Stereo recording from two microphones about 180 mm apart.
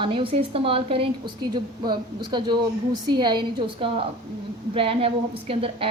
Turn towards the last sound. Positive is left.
turn(degrees=-30)  # may be behind; listen again after turning